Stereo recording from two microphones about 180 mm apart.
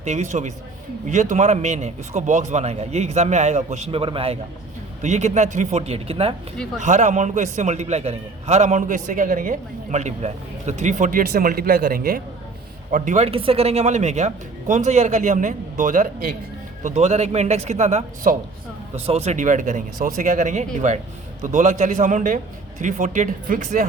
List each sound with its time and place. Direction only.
0.0 s a man's voice: 40° right (ahead or behind)
12.9 s a man's voice: 40° right (ahead or behind)